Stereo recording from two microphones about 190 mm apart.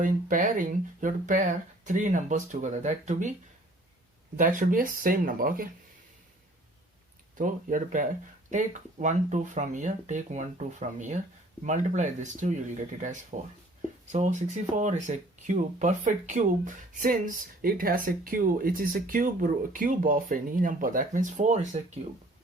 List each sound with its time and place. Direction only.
0.0 s speech: 45° right (ahead or behind)
4.4 s speech: 45° right (ahead or behind)
7.3 s speech: 45° right (ahead or behind)